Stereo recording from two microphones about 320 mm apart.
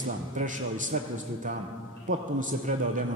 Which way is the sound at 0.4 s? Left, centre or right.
Right.